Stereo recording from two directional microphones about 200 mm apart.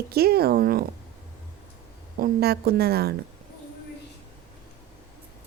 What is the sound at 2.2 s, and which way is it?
Speech, 50° right (ahead or behind).